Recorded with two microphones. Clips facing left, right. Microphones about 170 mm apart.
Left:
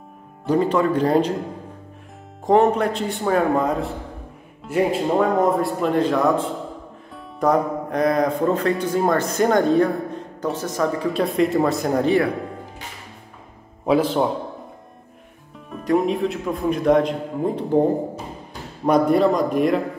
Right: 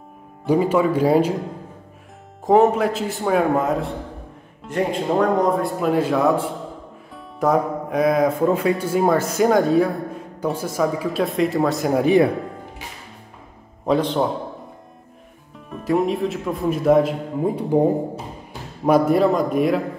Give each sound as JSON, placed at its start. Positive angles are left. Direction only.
{"t": 0.5, "sound": "speech", "side_deg": -10}
{"t": 2.4, "sound": "speech", "side_deg": -5}
{"t": 12.0, "sound": "speech", "side_deg": -15}
{"t": 13.8, "sound": "speech", "side_deg": 5}
{"t": 15.5, "sound": "a man's voice", "side_deg": 0}